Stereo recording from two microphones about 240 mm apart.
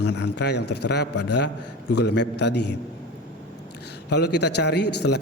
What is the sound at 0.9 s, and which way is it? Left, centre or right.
Speech, left.